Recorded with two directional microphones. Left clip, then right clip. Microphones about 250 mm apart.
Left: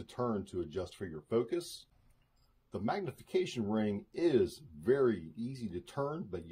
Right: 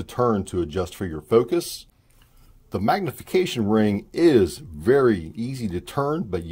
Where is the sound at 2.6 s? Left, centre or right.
Right.